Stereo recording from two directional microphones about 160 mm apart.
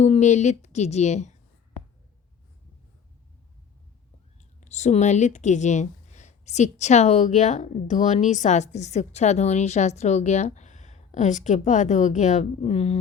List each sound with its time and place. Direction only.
0.0 s speech: 45° left (ahead or behind)
4.4 s speech: 45° left (ahead or behind)